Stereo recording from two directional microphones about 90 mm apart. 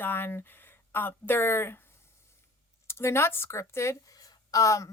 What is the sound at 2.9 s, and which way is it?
A woman's voice, 30° left (ahead or behind).